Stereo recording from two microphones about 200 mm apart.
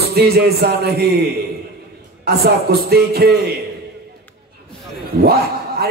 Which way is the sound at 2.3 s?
50° right (ahead or behind).